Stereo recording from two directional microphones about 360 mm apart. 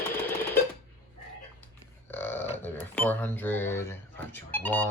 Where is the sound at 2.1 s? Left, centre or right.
Centre.